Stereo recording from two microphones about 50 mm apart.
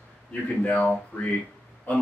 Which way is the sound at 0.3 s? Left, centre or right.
Left.